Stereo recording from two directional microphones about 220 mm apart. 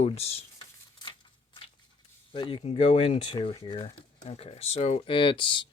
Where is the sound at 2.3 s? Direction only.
25° left (ahead or behind).